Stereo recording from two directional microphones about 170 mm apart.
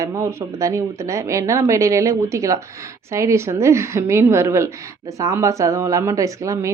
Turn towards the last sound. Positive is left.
turn(degrees=-20)  # may be behind; listen again after turning